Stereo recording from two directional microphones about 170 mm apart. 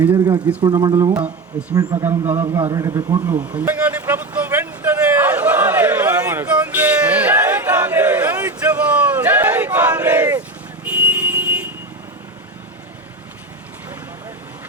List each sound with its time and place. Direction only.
0.3 s a man's voice: 25° right (ahead or behind)
2.6 s vehicle: 20° right (ahead or behind)
10.8 s a sound: 10° right (ahead or behind)